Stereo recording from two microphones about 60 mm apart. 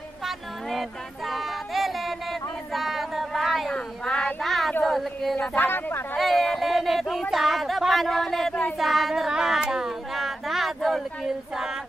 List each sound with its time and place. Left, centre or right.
0.2 s a sound: centre
3.7 s child singing: centre
4.4 s child singing: centre
4.8 s a woman's voice: centre
5.6 s speech: left
6.1 s a sound: centre
8.7 s child singing: centre